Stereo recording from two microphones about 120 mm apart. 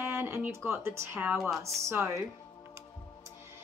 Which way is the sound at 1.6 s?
25° right (ahead or behind).